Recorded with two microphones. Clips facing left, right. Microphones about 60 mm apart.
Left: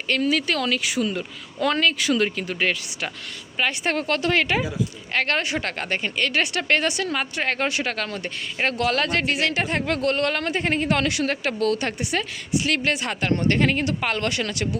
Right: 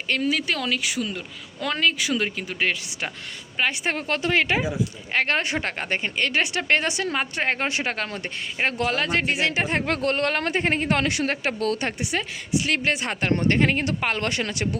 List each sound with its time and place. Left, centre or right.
0.1 s a woman's voice: centre; by 11.9 s right
11.9 s a woman's voice: centre